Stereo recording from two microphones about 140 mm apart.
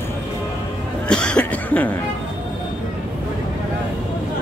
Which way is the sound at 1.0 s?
5° left (ahead or behind).